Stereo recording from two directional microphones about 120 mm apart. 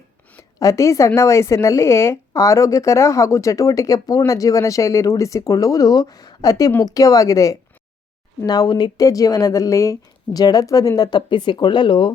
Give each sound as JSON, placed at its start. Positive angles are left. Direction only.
{"t": 0.6, "sound": "a woman's voice", "side_deg": 25}